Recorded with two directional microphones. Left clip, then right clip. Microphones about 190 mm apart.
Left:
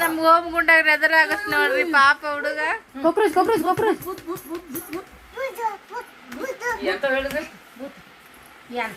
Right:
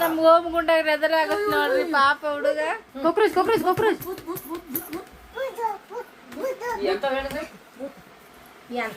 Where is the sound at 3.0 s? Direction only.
50° left (ahead or behind).